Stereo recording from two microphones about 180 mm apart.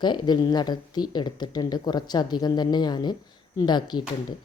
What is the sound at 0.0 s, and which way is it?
Speech, 25° left (ahead or behind).